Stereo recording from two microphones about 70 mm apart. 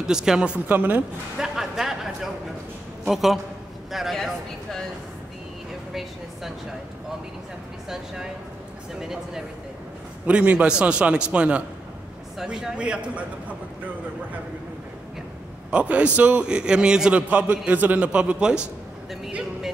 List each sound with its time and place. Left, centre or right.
0.0 s a man's voice: centre
0.7 s speech: right
1.4 s a sound: centre
3.1 s speech: centre
9.0 s a man's voice: centre
10.2 s a man's voice: centre
15.7 s a man's voice: centre